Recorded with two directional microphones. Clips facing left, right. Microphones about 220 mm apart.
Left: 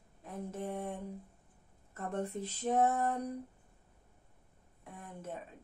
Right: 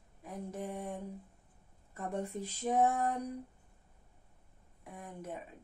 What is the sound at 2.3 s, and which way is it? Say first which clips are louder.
Speech: even; 10° right (ahead or behind).